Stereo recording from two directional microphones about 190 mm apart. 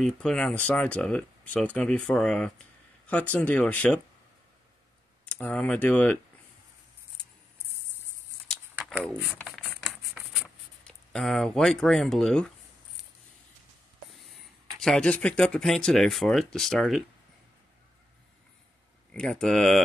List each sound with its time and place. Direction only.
0.0 s speech: 5° left (ahead or behind)
5.2 s speech: 5° left (ahead or behind)
8.7 s a sound: 10° right (ahead or behind)
9.0 s speech: 5° right (ahead or behind)
9.4 s a sound: 5° left (ahead or behind)
14.8 s speech: 5° left (ahead or behind)
19.1 s speech: 5° left (ahead or behind)